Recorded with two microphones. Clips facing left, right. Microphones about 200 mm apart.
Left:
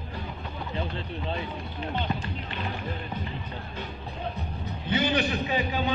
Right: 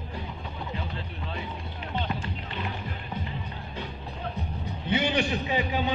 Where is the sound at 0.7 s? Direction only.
25° left (ahead or behind).